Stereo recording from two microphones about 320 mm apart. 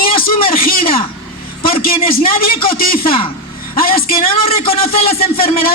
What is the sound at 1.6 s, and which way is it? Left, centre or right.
A man's voice, centre.